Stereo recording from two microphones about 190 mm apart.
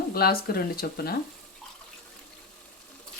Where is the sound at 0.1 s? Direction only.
55° left (ahead or behind).